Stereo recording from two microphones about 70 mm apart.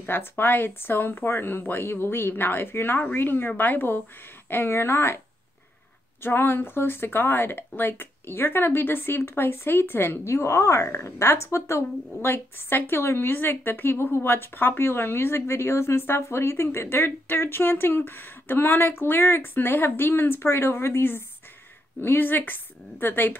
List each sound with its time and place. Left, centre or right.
0.0 s speech: left
6.2 s a woman's voice: left